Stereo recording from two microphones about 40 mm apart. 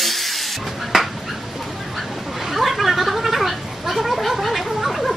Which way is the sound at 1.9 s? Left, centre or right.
Centre.